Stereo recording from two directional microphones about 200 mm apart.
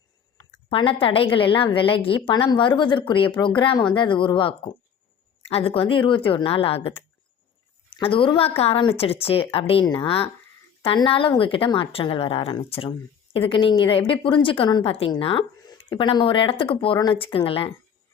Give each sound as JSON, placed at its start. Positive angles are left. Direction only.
{"t": 0.7, "sound": "a woman's voice", "side_deg": 25}